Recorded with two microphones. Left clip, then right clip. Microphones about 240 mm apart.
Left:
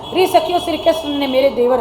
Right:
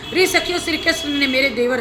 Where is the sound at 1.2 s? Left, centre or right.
Right.